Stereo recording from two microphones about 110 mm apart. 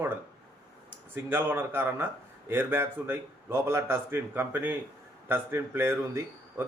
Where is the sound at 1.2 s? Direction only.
20° right (ahead or behind).